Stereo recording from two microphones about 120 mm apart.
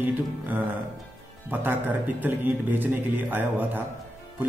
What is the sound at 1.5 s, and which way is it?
A man's voice, 15° right (ahead or behind).